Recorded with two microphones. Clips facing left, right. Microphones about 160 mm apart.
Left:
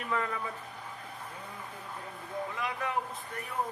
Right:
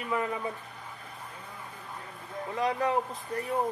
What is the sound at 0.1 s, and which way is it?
Speech, 20° right (ahead or behind).